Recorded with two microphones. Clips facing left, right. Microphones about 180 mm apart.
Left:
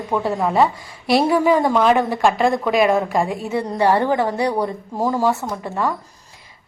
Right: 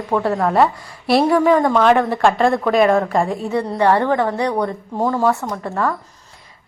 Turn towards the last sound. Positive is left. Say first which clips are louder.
# right 2 dB
turn(degrees=5)  # may be behind; listen again after turning